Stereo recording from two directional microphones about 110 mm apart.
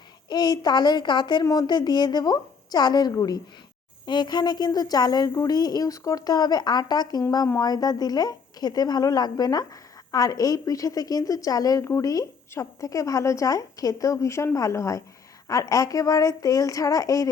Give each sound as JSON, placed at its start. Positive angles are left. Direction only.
{"t": 0.3, "sound": "speech", "side_deg": 40}